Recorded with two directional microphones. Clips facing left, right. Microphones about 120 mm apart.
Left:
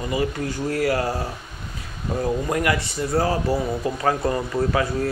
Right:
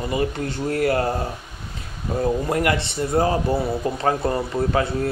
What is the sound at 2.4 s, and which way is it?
Speech, 30° right (ahead or behind).